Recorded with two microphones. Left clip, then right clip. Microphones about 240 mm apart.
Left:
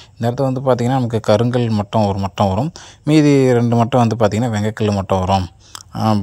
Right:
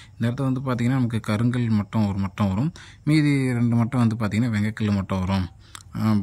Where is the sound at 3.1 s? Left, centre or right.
Left.